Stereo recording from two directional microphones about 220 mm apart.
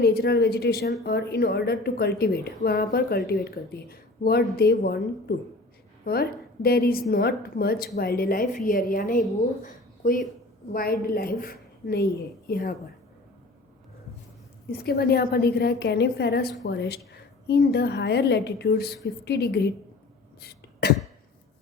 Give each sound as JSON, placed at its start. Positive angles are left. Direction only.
{"t": 0.0, "sound": "a woman's voice", "side_deg": 45}
{"t": 6.1, "sound": "a woman's voice", "side_deg": 45}
{"t": 9.6, "sound": "a sound", "side_deg": 40}
{"t": 10.7, "sound": "a woman's voice", "side_deg": 40}
{"t": 14.7, "sound": "a woman's voice", "side_deg": 45}
{"t": 20.4, "sound": "cough", "side_deg": 45}